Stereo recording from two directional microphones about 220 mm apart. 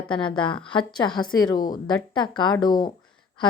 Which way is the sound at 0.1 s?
20° left (ahead or behind).